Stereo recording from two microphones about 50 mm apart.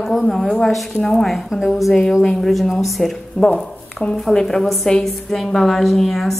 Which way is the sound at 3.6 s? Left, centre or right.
Centre.